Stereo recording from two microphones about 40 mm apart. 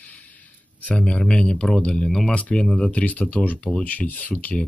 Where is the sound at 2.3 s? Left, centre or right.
Left.